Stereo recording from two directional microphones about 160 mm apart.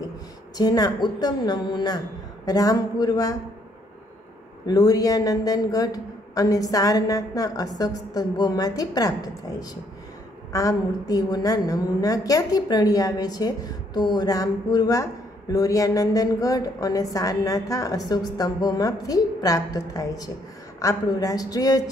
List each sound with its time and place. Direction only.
0.6 s a woman's voice: 25° left (ahead or behind)
4.6 s a woman's voice: 25° left (ahead or behind)